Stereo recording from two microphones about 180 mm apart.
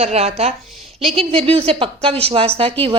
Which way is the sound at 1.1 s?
30° right (ahead or behind).